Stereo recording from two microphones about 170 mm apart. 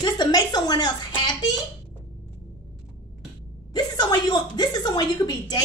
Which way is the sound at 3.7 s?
25° left (ahead or behind).